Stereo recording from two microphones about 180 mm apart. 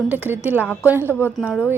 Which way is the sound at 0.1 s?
10° right (ahead or behind).